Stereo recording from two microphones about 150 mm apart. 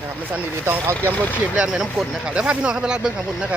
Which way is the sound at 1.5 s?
5° right (ahead or behind).